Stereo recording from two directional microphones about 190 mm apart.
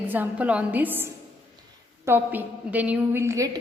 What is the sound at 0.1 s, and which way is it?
A woman's voice, 10° right (ahead or behind).